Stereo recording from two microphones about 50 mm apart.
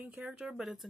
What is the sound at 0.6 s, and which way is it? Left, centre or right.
Speech, centre.